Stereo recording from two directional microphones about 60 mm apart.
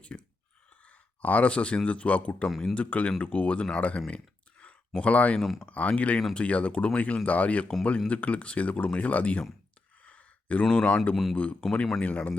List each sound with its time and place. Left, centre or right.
0.1 s whispering: left
0.9 s speech: left
5.4 s speech: centre
5.6 s speech: left
10.0 s a sound: left
11.1 s speech: centre
11.6 s speech: centre